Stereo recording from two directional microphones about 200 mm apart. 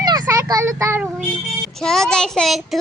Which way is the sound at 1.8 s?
5° left (ahead or behind).